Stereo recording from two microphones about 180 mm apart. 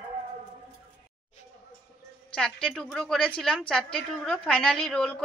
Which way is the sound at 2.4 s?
5° left (ahead or behind).